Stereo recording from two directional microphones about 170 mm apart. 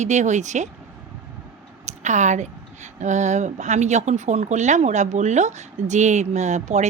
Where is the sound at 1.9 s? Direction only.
45° right (ahead or behind).